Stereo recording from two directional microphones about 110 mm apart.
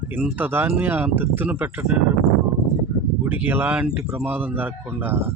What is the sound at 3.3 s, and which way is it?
Speech, 20° right (ahead or behind).